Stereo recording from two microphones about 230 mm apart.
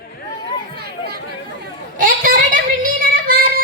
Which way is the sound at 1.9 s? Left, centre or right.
Right.